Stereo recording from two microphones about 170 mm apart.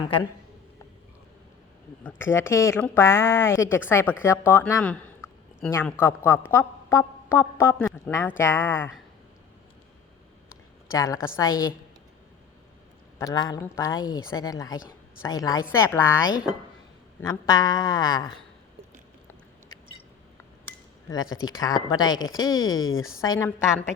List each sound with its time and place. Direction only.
2.0 s a woman's voice: 15° left (ahead or behind)
10.9 s a woman's voice: 20° left (ahead or behind)
13.1 s a woman's voice: 20° left (ahead or behind)
17.2 s a woman's voice: 20° left (ahead or behind)
21.1 s a woman's voice: 20° left (ahead or behind)